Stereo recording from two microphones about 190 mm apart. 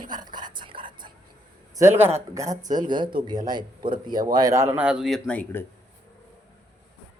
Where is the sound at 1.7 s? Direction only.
15° right (ahead or behind); by 5.6 s 10° left (ahead or behind).